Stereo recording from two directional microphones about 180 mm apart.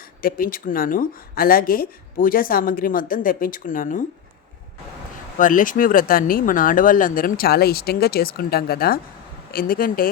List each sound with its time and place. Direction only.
0.2 s speech: 50° left (ahead or behind)
5.4 s speech: 50° left (ahead or behind)